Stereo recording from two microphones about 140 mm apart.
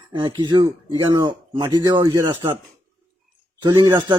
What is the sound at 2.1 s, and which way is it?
Speech, 15° right (ahead or behind).